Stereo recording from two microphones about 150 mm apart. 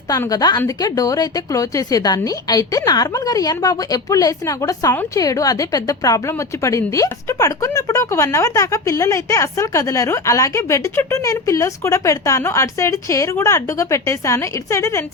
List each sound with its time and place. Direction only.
0.1 s a woman's voice: 25° left (ahead or behind)